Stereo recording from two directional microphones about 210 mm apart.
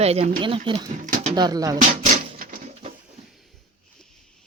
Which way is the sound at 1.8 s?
35° right (ahead or behind).